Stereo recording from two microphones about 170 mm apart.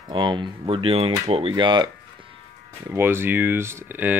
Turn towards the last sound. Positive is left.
turn(degrees=-10)  # may be behind; listen again after turning